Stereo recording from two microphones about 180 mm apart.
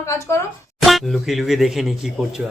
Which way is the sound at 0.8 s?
Centre (ahead or behind).